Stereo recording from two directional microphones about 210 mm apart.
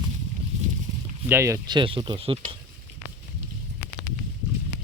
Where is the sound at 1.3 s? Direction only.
10° right (ahead or behind).